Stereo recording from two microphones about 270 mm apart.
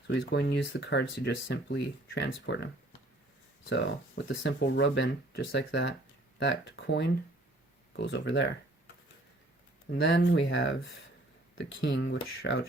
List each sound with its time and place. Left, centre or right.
0.1 s speech: left
3.7 s speech: left
9.9 s speech: left